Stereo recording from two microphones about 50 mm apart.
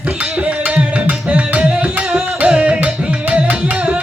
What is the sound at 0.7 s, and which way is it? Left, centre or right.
Music, right.